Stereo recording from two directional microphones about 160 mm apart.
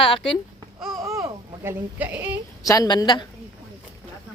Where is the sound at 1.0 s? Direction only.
20° right (ahead or behind).